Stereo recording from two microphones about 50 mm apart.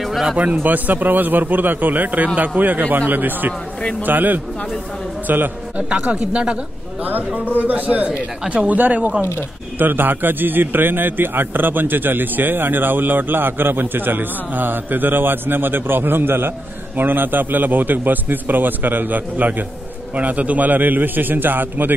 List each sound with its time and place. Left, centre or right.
0.4 s a man's voice: right
5.8 s speech: centre
7.3 s a man's voice: right